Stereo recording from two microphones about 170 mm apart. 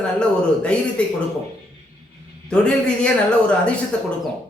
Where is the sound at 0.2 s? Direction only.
5° left (ahead or behind).